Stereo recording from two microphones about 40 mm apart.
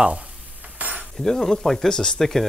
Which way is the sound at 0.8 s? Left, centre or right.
Right.